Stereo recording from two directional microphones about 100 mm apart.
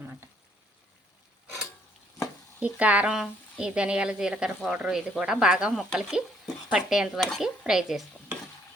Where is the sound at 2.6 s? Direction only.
15° right (ahead or behind).